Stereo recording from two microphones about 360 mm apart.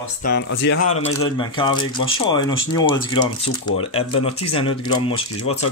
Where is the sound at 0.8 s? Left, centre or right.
Centre.